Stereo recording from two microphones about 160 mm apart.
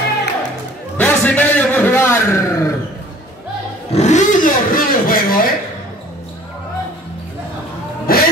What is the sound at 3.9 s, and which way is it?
Vehicle, 45° left (ahead or behind).